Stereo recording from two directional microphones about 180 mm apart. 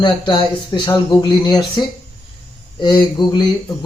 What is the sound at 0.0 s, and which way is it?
Speech, 25° left (ahead or behind).